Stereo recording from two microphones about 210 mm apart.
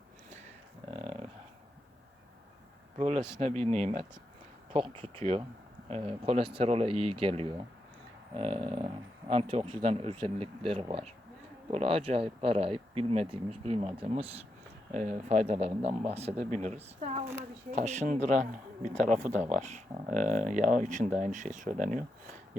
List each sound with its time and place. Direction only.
3.0 s a man's voice: 25° right (ahead or behind)